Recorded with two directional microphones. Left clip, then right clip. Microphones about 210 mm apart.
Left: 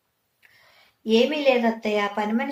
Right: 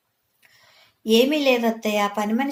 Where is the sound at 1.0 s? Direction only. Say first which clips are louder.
Right 1 dB; 45° right (ahead or behind).